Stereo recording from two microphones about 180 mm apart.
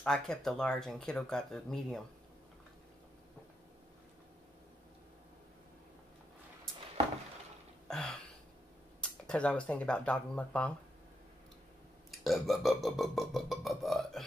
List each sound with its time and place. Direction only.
0.0 s burping: 5° left (ahead or behind)
7.9 s a sound: 5° left (ahead or behind)
9.0 s burping: 5° left (ahead or behind)
12.1 s burping: centre (ahead or behind)